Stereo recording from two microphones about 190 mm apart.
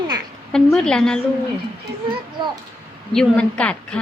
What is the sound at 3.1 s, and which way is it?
Speech, 5° left (ahead or behind).